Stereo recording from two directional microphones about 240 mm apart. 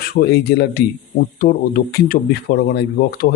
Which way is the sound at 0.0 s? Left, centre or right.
Left.